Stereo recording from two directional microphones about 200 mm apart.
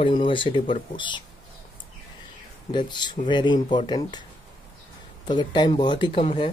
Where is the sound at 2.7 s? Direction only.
20° left (ahead or behind).